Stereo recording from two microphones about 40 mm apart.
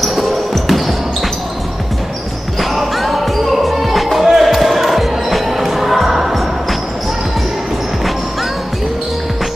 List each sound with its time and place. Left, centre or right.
0.0 s basketball bounce: centre
2.7 s basketball bounce: centre